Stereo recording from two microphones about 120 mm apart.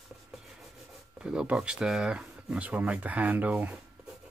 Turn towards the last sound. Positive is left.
turn(degrees=-10)  # may be behind; listen again after turning